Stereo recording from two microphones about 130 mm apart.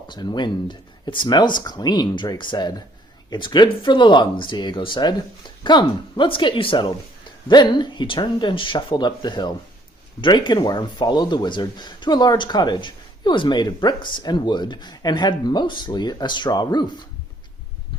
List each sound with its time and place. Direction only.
0.1 s speech: 35° left (ahead or behind)